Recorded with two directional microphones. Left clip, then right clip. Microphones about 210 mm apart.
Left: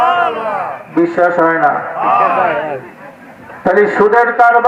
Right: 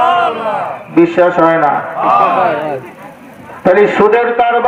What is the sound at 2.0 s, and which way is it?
Speech, 35° right (ahead or behind).